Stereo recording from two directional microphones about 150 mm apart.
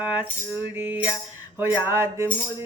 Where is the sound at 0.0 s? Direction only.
10° right (ahead or behind).